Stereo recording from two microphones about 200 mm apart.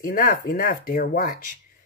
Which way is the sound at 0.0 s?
45° left (ahead or behind).